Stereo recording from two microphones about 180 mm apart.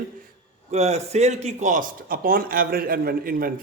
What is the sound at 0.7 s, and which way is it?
A man's voice, 35° right (ahead or behind).